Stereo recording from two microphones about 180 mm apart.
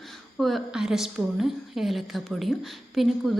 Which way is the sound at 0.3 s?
Centre (ahead or behind).